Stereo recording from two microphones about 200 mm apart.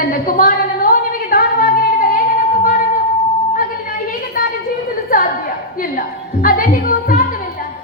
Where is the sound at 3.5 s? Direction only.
45° left (ahead or behind).